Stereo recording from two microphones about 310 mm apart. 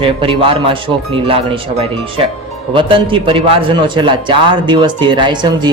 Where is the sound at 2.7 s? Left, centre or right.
Centre.